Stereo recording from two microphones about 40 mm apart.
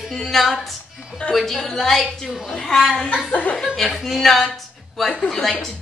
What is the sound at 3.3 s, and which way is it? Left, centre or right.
Speech, left.